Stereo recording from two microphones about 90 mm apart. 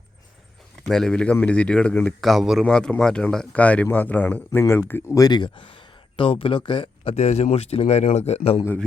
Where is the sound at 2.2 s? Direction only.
Centre (ahead or behind).